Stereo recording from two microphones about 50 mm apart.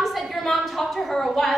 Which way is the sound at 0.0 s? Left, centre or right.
Centre.